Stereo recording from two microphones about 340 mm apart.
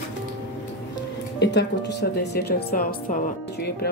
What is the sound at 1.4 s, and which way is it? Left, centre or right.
Speech, left.